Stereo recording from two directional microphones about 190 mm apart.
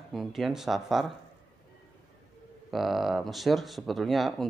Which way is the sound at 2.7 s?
Centre (ahead or behind).